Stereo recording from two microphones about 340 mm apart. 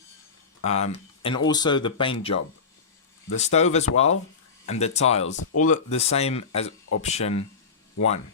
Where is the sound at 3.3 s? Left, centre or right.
Centre.